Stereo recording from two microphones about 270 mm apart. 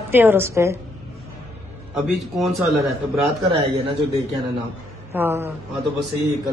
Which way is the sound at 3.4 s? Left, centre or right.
Right.